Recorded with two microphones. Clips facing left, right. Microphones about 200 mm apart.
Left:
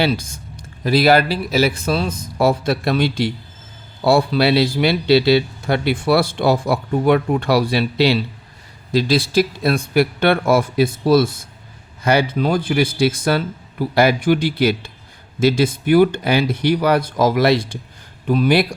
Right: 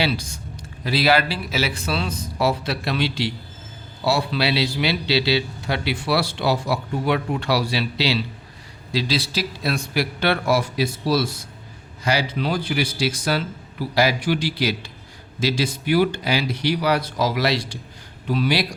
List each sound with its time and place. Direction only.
0.0 s a man's voice: 50° left (ahead or behind)